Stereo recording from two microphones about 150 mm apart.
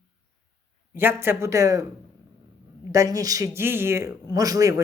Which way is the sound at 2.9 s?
25° right (ahead or behind).